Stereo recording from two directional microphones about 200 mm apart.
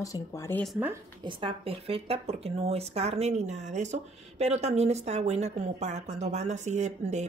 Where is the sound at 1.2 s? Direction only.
25° right (ahead or behind).